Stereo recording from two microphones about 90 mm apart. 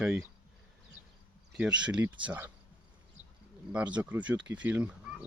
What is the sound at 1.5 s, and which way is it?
Speech, 10° right (ahead or behind).